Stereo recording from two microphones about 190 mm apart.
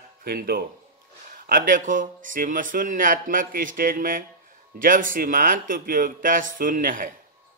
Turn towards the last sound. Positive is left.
turn(degrees=-45)  # may be behind; listen again after turning